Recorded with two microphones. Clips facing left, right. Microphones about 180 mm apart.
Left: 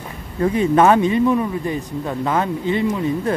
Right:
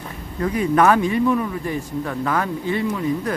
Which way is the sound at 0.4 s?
25° left (ahead or behind).